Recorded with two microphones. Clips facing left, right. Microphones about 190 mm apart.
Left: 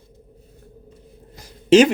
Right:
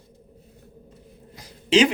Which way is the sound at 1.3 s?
45° left (ahead or behind).